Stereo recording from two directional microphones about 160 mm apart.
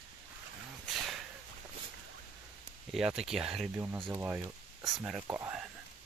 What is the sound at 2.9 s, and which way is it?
Speech, 5° right (ahead or behind).